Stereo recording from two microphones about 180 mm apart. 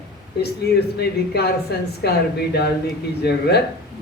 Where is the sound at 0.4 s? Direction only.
65° left (ahead or behind).